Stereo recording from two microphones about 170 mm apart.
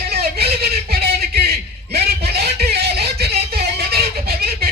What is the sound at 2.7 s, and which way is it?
Music, 70° right (ahead or behind).